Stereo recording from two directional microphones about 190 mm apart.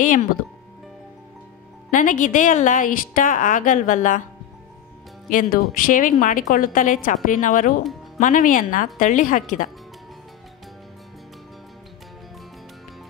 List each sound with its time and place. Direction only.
1.9 s a woman's voice: 45° left (ahead or behind)
5.3 s a woman's voice: 45° left (ahead or behind)